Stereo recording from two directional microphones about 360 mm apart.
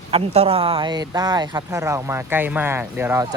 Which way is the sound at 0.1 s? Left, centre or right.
Centre.